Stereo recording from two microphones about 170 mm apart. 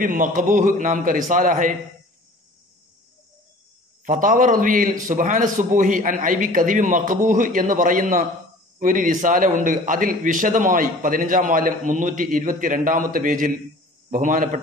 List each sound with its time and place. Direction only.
0.0 s a man's voice: 55° right (ahead or behind)
4.0 s a man's voice: 50° right (ahead or behind)